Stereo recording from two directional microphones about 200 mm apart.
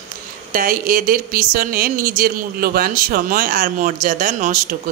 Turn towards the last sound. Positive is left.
turn(degrees=-40)  # may be behind; listen again after turning